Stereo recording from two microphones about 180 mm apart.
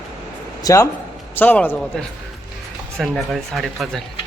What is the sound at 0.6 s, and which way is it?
A man's voice, 20° left (ahead or behind).